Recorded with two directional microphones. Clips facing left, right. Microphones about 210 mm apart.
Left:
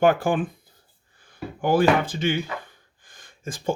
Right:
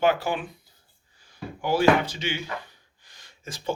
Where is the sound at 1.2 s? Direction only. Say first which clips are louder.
Left 5 dB; 55° left (ahead or behind).